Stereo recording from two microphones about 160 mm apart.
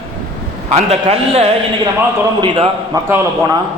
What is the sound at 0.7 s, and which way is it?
A man's voice, 40° right (ahead or behind).